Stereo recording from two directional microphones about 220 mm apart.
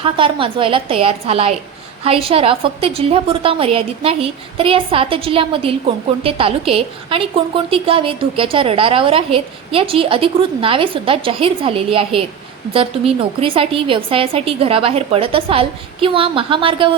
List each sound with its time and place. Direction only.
0.0 s a woman's voice: 25° right (ahead or behind)